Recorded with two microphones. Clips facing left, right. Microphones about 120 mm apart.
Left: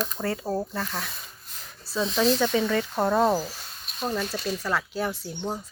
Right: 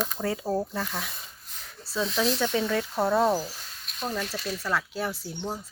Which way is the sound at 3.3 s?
25° left (ahead or behind).